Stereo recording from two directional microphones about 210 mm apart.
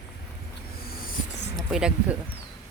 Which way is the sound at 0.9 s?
45° left (ahead or behind).